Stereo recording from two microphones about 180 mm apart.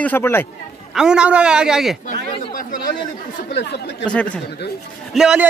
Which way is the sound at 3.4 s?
65° left (ahead or behind).